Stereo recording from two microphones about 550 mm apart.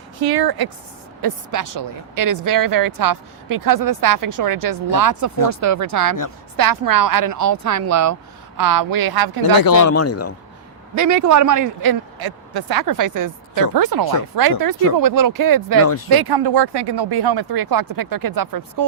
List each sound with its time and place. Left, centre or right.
0.2 s a woman's voice: right
9.6 s speech: left
10.9 s a woman's voice: right